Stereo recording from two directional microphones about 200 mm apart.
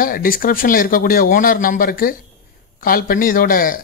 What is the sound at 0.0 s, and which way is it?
Speech, 45° left (ahead or behind).